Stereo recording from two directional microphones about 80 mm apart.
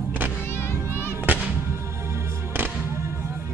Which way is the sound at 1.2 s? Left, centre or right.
Right.